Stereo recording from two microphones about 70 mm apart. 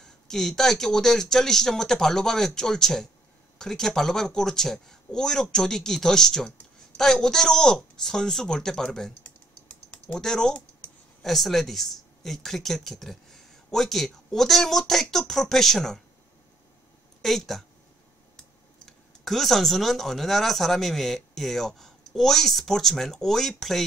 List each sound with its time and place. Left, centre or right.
0.0 s speech: centre
9.2 s typing: left
10.1 s speech: centre
17.2 s speech: centre
18.9 s speech: centre